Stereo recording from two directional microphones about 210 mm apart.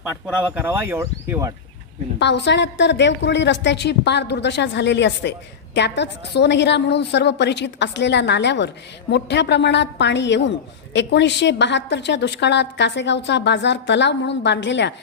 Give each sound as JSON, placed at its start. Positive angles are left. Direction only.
{"t": 0.3, "sound": "speech", "side_deg": -5}
{"t": 2.1, "sound": "a woman's voice", "side_deg": 55}